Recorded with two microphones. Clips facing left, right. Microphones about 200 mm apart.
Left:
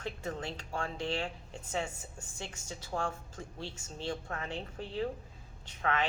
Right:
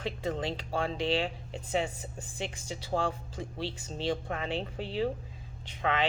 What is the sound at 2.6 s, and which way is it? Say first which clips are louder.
Speech: right 5 dB; 90° right.